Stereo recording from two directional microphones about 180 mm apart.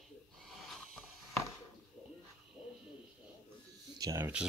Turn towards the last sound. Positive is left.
turn(degrees=-20)  # may be behind; listen again after turning